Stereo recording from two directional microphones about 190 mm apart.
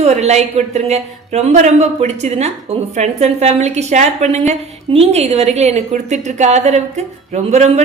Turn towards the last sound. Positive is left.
turn(degrees=-35)  # may be behind; listen again after turning